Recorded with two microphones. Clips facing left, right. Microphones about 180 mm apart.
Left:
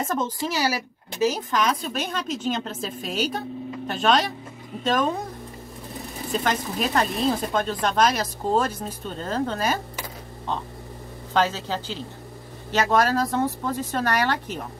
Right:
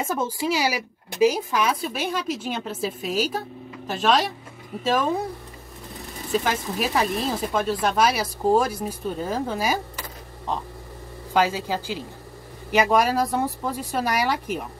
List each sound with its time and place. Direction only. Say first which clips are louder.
0.0 s speech: right 1 dB; 10° right (ahead or behind)
6.3 s speech: right 1 dB; 5° right (ahead or behind)
11.3 s speech: right 1 dB; 10° right (ahead or behind)